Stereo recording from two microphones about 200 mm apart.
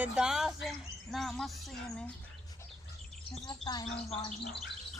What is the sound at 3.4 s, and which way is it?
Speech, 20° left (ahead or behind).